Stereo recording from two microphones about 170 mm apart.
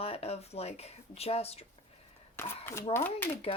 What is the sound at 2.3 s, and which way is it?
Speech, 15° left (ahead or behind).